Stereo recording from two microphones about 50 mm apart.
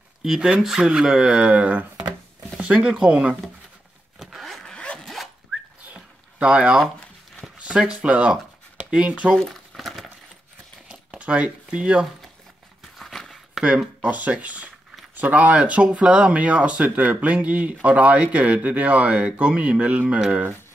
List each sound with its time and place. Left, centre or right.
0.2 s speech: centre; by 2.0 s right
2.5 s speech: centre
4.2 s vehicle: centre
4.6 s zipper: centre
5.0 s zipper: centre
5.9 s a sound: centre
7.5 s speech: centre
9.4 s a sound: centre
10.9 s crumpling: right
12.8 s a sound: centre
14.0 s speech: right